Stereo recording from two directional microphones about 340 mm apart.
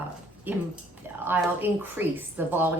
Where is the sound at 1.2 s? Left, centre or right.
Centre.